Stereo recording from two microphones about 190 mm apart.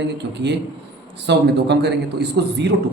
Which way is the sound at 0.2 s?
65° right (ahead or behind).